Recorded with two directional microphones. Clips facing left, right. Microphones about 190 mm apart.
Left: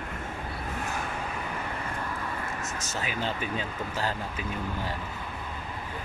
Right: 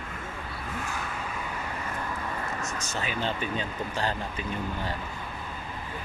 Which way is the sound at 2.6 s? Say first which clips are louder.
Right 1 dB; 20° left (ahead or behind).